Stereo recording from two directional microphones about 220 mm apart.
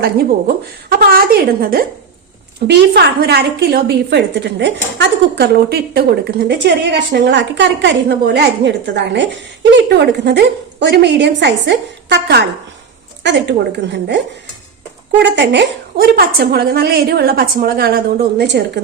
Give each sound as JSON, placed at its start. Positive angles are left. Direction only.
{"t": 0.0, "sound": "a woman's voice", "side_deg": -45}
{"t": 15.4, "sound": "a woman's voice", "side_deg": -50}